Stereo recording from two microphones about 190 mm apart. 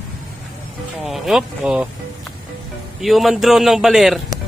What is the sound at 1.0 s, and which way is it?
Speech, centre (ahead or behind).